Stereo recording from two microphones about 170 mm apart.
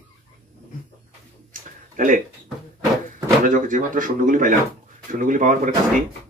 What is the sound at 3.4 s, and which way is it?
Speech, 50° right (ahead or behind).